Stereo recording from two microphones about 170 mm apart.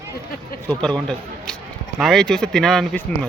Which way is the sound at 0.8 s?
5° left (ahead or behind).